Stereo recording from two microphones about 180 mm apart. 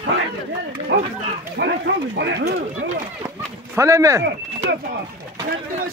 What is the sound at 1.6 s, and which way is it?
Speech, 65° right (ahead or behind).